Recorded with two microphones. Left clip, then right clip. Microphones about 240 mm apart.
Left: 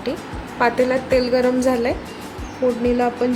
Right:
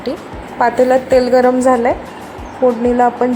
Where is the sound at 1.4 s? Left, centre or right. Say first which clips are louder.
Right 7 dB; centre.